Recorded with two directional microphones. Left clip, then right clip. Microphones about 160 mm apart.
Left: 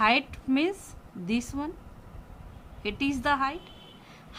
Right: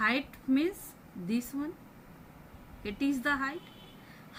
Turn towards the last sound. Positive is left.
turn(degrees=60)  # may be behind; listen again after turning